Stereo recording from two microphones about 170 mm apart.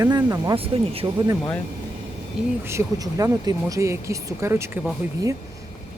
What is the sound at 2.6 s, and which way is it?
Speech, 15° right (ahead or behind).